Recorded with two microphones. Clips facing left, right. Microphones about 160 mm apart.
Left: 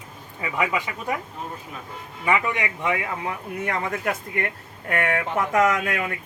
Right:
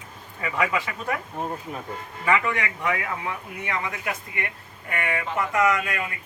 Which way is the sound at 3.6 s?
45° left (ahead or behind).